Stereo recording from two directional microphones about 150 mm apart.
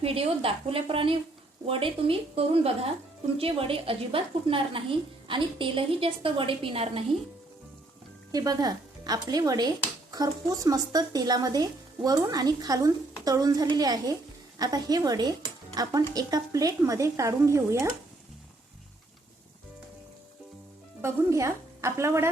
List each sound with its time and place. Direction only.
0.0 s a woman's voice: 40° right (ahead or behind)
8.3 s a woman's voice: 25° right (ahead or behind)
21.0 s a woman's voice: 20° right (ahead or behind)